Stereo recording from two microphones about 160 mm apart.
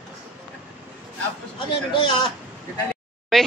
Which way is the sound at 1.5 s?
30° left (ahead or behind).